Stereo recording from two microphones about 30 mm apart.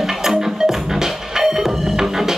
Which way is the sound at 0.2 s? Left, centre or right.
Centre.